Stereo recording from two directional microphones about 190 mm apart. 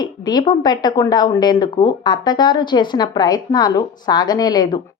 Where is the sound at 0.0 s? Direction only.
20° left (ahead or behind).